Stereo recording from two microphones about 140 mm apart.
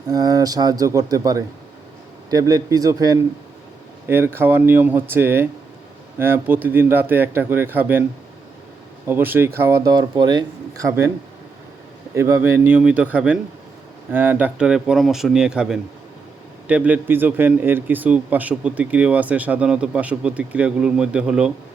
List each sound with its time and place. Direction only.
0.1 s a man's voice: 25° right (ahead or behind)
9.0 s a man's voice: 15° right (ahead or behind)
12.1 s a man's voice: 20° right (ahead or behind)